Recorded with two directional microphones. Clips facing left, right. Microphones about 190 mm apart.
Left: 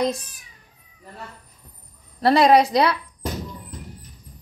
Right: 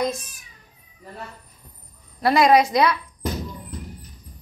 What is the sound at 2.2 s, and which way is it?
Speech, 35° left (ahead or behind).